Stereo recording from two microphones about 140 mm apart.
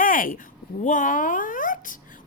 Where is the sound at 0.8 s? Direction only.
65° left (ahead or behind).